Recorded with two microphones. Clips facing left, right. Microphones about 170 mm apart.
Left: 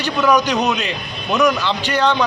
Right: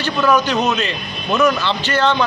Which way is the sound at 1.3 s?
Centre (ahead or behind).